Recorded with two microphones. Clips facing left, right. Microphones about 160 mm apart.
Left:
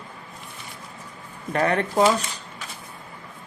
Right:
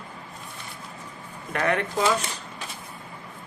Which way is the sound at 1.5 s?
35° left (ahead or behind).